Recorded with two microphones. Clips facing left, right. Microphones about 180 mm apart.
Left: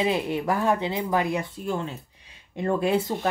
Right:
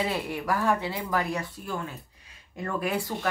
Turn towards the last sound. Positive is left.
turn(degrees=25)  # may be behind; listen again after turning